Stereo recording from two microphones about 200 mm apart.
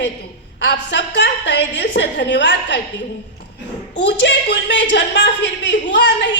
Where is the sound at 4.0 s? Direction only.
60° left (ahead or behind).